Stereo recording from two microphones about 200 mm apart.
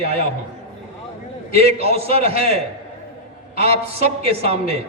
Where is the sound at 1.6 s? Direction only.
30° right (ahead or behind).